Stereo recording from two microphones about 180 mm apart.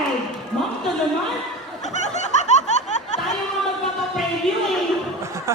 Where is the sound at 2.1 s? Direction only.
40° left (ahead or behind).